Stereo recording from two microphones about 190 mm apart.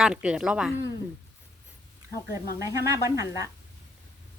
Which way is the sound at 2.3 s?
15° right (ahead or behind).